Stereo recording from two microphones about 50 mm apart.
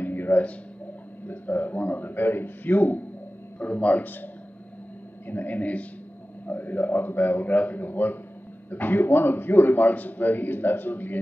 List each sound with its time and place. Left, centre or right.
0.0 s a sound: left
1.2 s speech: left
3.5 s speech: left